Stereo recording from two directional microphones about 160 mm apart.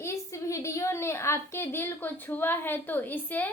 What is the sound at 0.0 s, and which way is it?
A woman's voice, 20° left (ahead or behind).